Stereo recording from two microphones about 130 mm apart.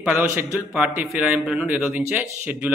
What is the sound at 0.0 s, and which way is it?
A man's voice, 10° right (ahead or behind).